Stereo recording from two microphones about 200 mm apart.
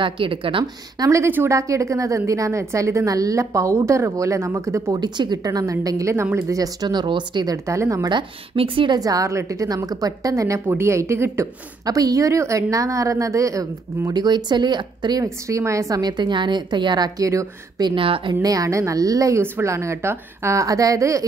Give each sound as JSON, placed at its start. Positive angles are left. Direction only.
{"t": 0.0, "sound": "a woman's voice", "side_deg": -25}